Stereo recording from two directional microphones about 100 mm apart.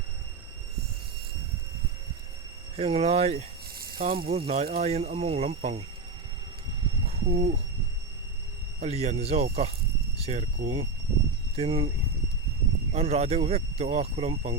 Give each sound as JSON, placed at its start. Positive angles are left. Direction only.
{"t": 2.7, "sound": "speech", "side_deg": -80}
{"t": 6.8, "sound": "a sound", "side_deg": -70}
{"t": 8.8, "sound": "speech", "side_deg": -90}
{"t": 12.9, "sound": "speech", "side_deg": -90}